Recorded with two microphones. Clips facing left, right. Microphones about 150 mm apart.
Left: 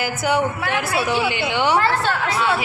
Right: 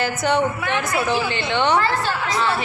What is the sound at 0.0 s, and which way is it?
Speech, 5° left (ahead or behind).